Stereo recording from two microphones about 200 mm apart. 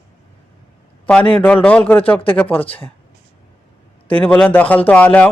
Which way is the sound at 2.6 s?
25° left (ahead or behind).